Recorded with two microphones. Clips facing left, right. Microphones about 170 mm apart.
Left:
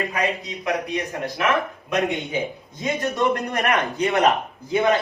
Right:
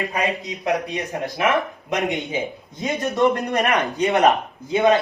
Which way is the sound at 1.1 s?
20° right (ahead or behind).